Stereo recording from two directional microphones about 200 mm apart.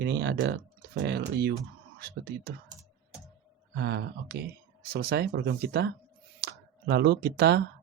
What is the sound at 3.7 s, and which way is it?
Speech, 55° right (ahead or behind).